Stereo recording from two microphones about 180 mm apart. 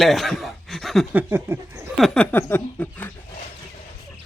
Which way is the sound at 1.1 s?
10° right (ahead or behind).